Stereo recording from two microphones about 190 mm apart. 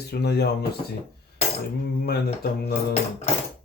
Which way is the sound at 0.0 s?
60° left (ahead or behind).